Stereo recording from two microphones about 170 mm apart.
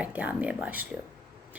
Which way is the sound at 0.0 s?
10° right (ahead or behind).